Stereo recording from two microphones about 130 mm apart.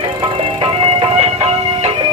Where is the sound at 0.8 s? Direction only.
50° right (ahead or behind).